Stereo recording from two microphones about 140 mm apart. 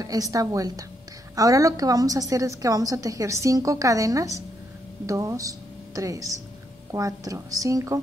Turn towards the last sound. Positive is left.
turn(degrees=-25)  # may be behind; listen again after turning